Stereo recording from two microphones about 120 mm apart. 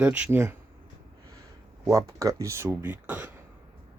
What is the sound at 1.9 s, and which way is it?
Speech, 25° right (ahead or behind).